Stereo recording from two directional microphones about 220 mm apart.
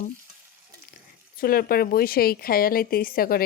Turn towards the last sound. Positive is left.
turn(degrees=40)  # may be behind; listen again after turning